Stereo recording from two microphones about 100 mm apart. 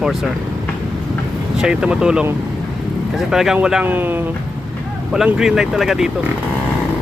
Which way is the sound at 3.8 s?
20° right (ahead or behind).